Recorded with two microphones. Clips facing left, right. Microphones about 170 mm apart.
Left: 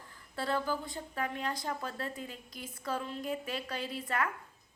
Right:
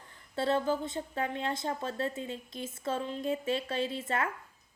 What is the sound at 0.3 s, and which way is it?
A woman's voice, 25° right (ahead or behind).